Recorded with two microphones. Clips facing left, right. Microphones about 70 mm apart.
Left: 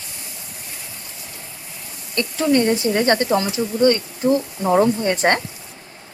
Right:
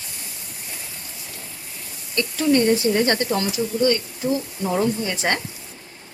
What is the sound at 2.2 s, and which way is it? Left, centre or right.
Speech, left.